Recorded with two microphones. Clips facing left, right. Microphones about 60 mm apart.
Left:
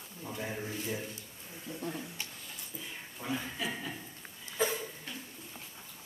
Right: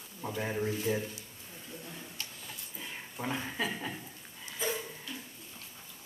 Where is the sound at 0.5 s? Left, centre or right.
Right.